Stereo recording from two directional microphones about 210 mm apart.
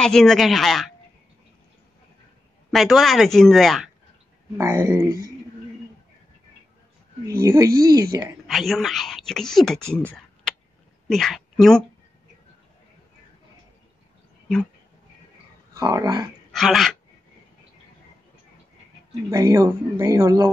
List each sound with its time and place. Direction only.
0.0 s speech: centre (ahead or behind)
2.7 s speech: centre (ahead or behind)
4.6 s speech: 15° right (ahead or behind)
7.2 s speech: 15° right (ahead or behind)
8.5 s speech: centre (ahead or behind)
9.9 s a sound: 5° left (ahead or behind)
11.1 s a woman's voice: centre (ahead or behind)
15.7 s speech: 15° right (ahead or behind)
16.5 s speech: centre (ahead or behind)
19.3 s speech: 15° right (ahead or behind)